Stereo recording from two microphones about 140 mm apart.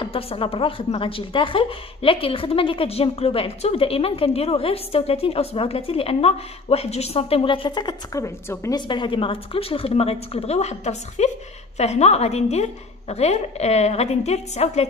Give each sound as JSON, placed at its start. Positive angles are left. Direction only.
{"t": 0.0, "sound": "speech", "side_deg": 40}
{"t": 8.8, "sound": "speech", "side_deg": 35}